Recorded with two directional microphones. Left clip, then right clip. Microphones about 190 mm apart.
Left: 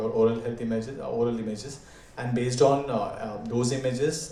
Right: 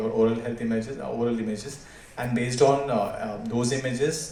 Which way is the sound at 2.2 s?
50° left (ahead or behind).